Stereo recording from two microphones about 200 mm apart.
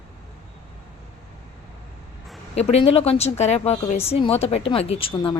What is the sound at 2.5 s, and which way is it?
A woman's voice, 30° left (ahead or behind).